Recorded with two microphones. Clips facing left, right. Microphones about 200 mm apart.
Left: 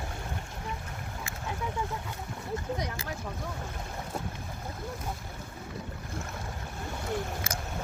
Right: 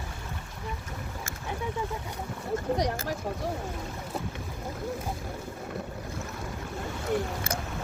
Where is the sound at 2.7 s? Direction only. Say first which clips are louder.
Right 7 dB; 40° right (ahead or behind).